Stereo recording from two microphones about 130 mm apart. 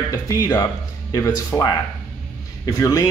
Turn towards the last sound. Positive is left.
turn(degrees=25)  # may be behind; listen again after turning